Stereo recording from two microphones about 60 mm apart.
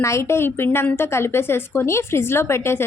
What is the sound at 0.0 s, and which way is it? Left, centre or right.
A woman's voice, left.